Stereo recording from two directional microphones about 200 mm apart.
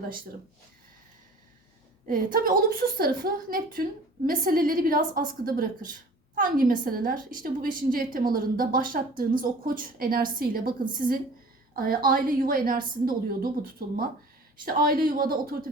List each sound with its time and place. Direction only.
2.0 s a woman's voice: 45° right (ahead or behind)